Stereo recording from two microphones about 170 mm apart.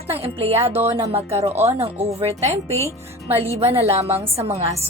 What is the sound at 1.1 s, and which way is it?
A woman's voice, 35° right (ahead or behind).